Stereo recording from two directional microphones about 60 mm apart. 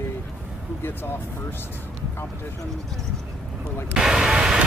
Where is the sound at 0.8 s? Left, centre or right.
Left.